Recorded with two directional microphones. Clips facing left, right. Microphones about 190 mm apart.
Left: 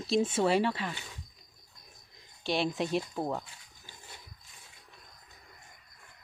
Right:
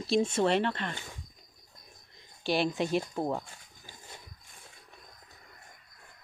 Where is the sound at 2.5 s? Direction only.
Centre (ahead or behind).